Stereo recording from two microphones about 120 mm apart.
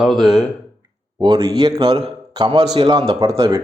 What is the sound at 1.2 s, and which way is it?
A man's voice, 40° right (ahead or behind).